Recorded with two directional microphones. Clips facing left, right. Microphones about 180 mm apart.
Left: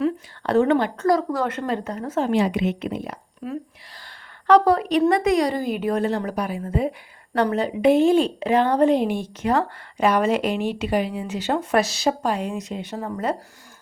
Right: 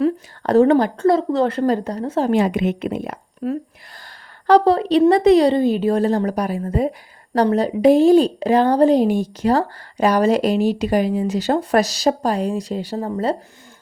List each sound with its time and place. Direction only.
0.0 s a woman's voice: 35° right (ahead or behind)
2.3 s speech: 50° right (ahead or behind)
3.9 s a woman's voice: 40° right (ahead or behind)